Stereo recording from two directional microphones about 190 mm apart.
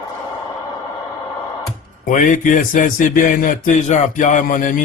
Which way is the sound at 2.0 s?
45° left (ahead or behind).